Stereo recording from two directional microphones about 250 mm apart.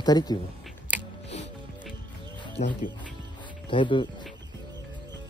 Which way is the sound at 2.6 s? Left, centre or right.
Left.